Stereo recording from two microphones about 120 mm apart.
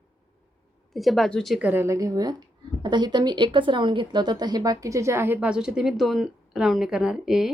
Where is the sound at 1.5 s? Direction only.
15° right (ahead or behind).